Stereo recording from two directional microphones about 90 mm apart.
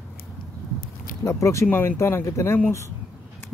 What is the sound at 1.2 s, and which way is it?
Speech, 35° left (ahead or behind).